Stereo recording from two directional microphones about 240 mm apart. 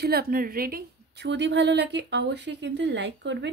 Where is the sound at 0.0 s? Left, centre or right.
Right.